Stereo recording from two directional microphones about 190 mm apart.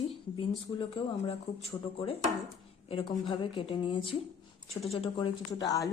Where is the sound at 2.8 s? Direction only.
25° left (ahead or behind).